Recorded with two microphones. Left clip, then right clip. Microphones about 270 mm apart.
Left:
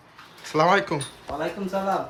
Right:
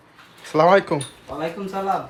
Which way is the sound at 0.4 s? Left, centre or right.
Centre.